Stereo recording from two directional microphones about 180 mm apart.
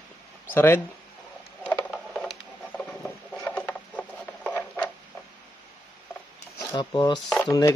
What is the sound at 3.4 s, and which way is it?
Wood, 10° left (ahead or behind).